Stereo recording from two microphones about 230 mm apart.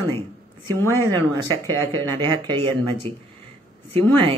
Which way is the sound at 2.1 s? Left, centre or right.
Centre.